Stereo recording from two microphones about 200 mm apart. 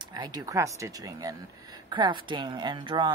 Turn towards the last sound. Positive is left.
turn(degrees=-25)  # may be behind; listen again after turning